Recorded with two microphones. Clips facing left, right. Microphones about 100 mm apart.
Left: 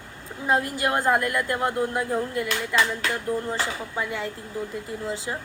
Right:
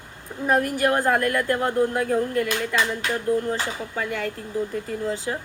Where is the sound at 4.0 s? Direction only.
15° left (ahead or behind).